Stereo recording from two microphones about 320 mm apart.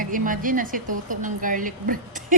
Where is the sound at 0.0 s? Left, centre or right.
Right.